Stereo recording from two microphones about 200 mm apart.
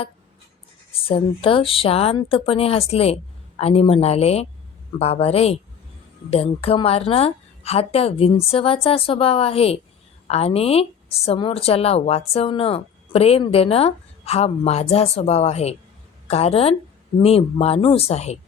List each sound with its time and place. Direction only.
0.9 s a woman's voice: 30° left (ahead or behind)